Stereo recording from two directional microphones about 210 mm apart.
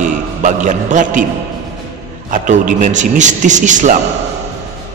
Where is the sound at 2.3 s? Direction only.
35° right (ahead or behind).